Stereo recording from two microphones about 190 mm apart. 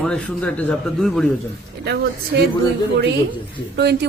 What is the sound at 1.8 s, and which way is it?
Speech, 60° right (ahead or behind).